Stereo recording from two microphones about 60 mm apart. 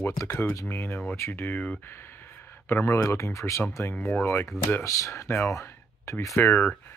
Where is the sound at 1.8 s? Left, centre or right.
Left.